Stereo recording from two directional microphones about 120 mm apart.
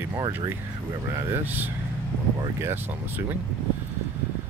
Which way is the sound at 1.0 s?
25° right (ahead or behind).